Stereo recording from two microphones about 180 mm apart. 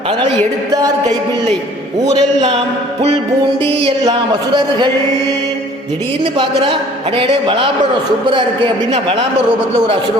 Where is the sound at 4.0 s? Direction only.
25° right (ahead or behind).